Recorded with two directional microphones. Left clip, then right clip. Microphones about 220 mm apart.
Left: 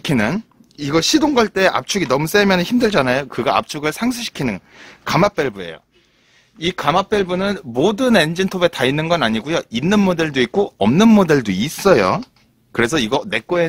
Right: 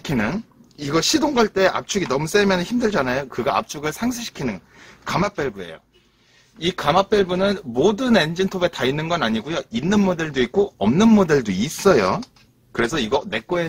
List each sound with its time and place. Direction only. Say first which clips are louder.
0.0 s speech: left 5 dB; 45° left (ahead or behind)